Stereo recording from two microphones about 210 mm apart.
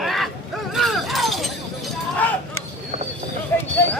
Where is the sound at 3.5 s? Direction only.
10° left (ahead or behind).